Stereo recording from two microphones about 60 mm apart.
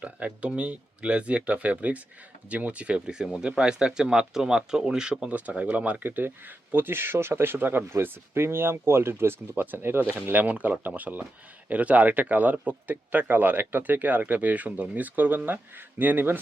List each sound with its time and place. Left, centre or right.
0.0 s speech: right
3.2 s speech: centre; by 10.0 s right
10.3 s speech: right